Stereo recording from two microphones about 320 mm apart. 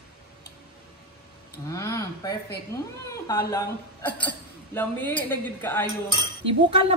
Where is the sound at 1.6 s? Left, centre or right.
Centre.